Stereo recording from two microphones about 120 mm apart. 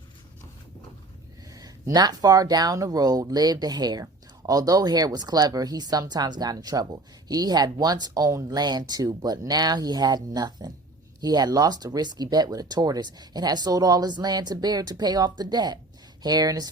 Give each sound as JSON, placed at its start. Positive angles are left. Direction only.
{"t": 1.5, "sound": "speech", "side_deg": -30}